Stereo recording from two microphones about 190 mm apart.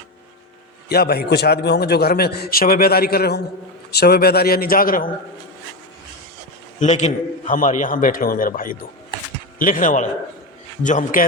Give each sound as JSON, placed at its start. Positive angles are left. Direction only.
{"t": 0.9, "sound": "a man's voice", "side_deg": 55}
{"t": 6.7, "sound": "a man's voice", "side_deg": 35}